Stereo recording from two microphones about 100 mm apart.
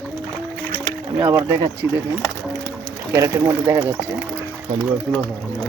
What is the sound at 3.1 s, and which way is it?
Speech, 35° right (ahead or behind).